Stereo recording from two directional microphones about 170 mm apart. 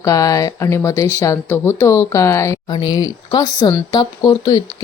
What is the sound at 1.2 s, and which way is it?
Speech, 15° left (ahead or behind).